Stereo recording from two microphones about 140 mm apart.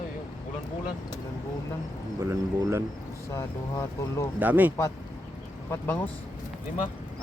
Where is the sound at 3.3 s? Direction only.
20° left (ahead or behind).